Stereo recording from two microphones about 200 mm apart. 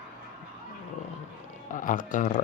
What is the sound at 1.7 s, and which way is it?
Speech, 40° left (ahead or behind).